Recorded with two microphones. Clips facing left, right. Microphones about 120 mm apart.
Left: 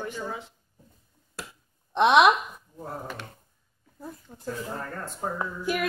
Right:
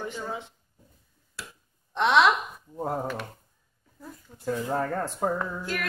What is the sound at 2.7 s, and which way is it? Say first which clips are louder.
Speech: right 8 dB; 85° right.